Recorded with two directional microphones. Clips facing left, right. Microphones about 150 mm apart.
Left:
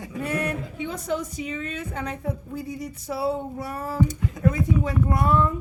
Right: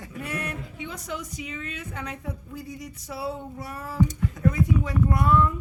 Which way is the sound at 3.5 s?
55° left (ahead or behind).